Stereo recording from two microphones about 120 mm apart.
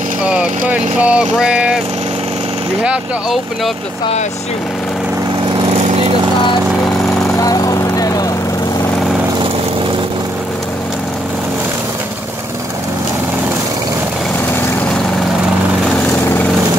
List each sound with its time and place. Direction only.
0.2 s speech: 10° right (ahead or behind)
2.8 s speech: 5° right (ahead or behind)
5.8 s vehicle: 65° right (ahead or behind)
7.2 s vehicle: 30° left (ahead or behind)
16.1 s vehicle: 15° left (ahead or behind)